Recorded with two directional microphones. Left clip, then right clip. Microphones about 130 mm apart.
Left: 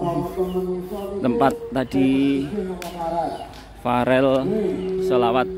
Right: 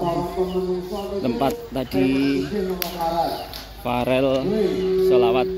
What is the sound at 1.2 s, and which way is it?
Speech, 35° left (ahead or behind).